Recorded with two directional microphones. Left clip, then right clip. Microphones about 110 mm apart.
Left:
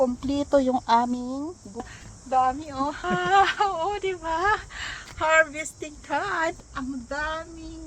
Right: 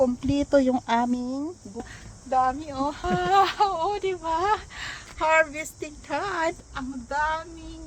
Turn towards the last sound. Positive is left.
turn(degrees=-30)  # may be behind; listen again after turning